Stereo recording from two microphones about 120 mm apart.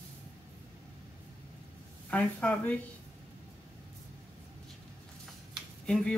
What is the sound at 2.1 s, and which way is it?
Speech, 10° left (ahead or behind).